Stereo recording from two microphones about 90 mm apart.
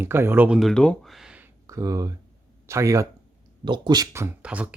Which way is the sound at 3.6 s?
55° right (ahead or behind).